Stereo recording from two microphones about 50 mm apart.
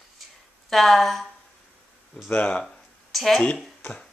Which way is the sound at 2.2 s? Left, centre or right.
Left.